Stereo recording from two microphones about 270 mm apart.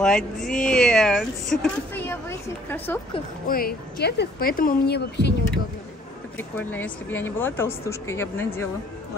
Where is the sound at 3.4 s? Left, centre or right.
Left.